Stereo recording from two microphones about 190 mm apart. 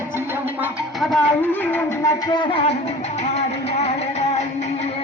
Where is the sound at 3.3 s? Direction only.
35° left (ahead or behind).